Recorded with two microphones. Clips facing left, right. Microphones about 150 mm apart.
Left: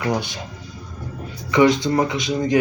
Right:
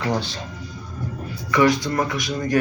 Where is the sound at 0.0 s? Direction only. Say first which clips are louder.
Left 1 dB; 15° left (ahead or behind).